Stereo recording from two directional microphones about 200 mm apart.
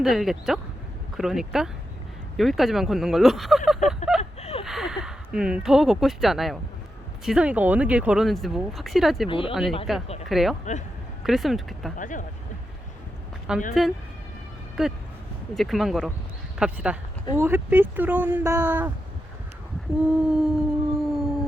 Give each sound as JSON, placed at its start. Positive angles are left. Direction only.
{"t": 0.0, "sound": "speech", "side_deg": 0}
{"t": 3.8, "sound": "a sound", "side_deg": 0}
{"t": 4.2, "sound": "a sound", "side_deg": 30}
{"t": 4.6, "sound": "speech", "side_deg": 0}
{"t": 9.3, "sound": "speech", "side_deg": 25}
{"t": 9.9, "sound": "speech", "side_deg": 0}
{"t": 11.9, "sound": "speech", "side_deg": 40}
{"t": 13.5, "sound": "speech", "side_deg": -5}
{"t": 14.8, "sound": "speech", "side_deg": 0}
{"t": 20.0, "sound": "a sound", "side_deg": -5}